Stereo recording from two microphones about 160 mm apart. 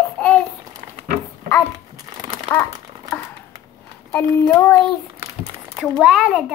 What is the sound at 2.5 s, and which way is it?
Speech, 15° left (ahead or behind).